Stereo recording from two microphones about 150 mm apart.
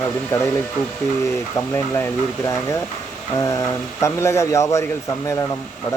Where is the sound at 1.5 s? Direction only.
15° left (ahead or behind).